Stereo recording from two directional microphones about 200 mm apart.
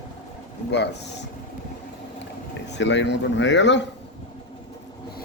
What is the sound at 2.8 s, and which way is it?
Speech, 60° left (ahead or behind).